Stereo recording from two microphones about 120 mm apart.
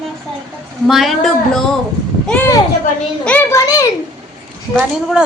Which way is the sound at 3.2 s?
10° left (ahead or behind).